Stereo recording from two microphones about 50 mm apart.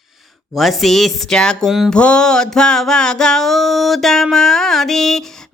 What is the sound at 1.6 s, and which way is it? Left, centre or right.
Speech, centre.